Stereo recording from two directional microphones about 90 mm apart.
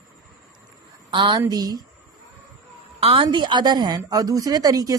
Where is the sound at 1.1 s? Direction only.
60° right (ahead or behind).